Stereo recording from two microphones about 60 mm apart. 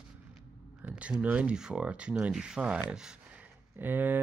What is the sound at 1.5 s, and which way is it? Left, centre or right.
Speech, centre.